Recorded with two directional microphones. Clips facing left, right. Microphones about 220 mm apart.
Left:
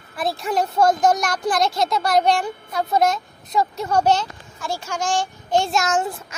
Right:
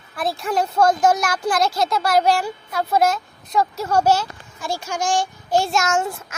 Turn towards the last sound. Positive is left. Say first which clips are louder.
# even
turn(degrees=0)  # may be behind; listen again after turning